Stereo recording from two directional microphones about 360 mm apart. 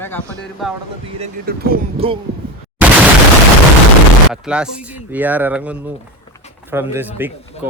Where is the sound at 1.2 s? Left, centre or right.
Right.